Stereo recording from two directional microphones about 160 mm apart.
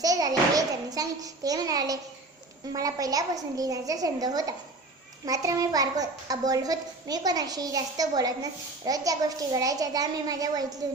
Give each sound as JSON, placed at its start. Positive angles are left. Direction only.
{"t": 0.0, "sound": "a child's voice", "side_deg": -25}